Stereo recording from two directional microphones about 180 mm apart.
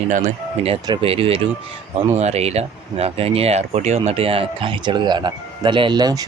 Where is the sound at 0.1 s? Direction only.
40° right (ahead or behind).